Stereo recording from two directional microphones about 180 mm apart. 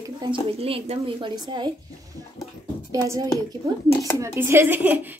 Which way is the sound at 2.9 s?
20° right (ahead or behind).